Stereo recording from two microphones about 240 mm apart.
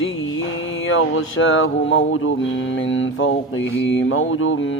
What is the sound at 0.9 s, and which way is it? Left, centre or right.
Mantra, left.